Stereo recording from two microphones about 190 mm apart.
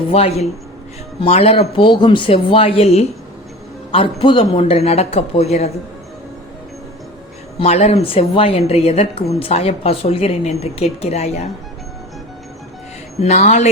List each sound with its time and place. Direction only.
0.1 s a woman's voice: 35° left (ahead or behind)
7.6 s a woman's voice: 35° left (ahead or behind)
13.1 s a woman's voice: 35° left (ahead or behind)